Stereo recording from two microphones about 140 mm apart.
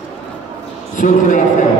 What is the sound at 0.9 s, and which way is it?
Speech, 65° left (ahead or behind).